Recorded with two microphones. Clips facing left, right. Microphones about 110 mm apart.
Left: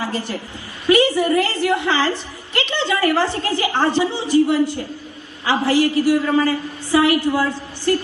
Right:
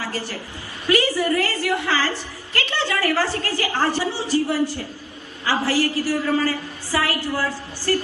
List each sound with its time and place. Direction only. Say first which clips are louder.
0.0 s a woman's voice: left 4 dB; 20° left (ahead or behind)